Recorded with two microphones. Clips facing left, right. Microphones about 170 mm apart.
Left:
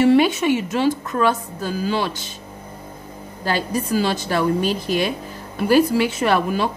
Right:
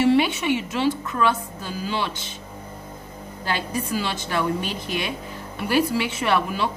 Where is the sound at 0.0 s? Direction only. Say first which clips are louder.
Left 4 dB; 45° left (ahead or behind).